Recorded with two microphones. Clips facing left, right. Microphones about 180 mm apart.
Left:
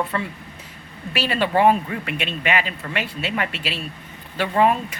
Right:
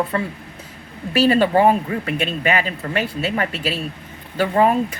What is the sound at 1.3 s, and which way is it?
Speech, 40° right (ahead or behind).